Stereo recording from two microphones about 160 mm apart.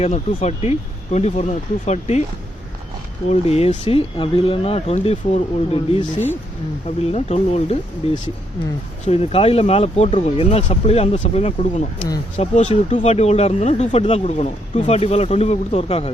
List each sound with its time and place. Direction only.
0.0 s speech: 40° left (ahead or behind)
3.2 s speech: 40° left (ahead or behind)